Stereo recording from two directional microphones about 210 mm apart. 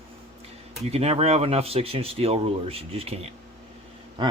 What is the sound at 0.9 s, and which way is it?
Speech, 30° right (ahead or behind).